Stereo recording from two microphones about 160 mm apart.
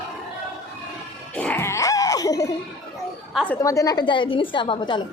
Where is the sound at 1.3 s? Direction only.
10° left (ahead or behind).